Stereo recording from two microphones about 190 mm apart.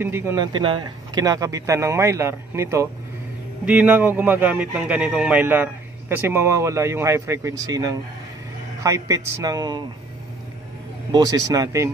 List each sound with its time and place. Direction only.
0.0 s speech: 15° right (ahead or behind)
0.5 s speech: 25° right (ahead or behind)
11.1 s speech: 20° right (ahead or behind)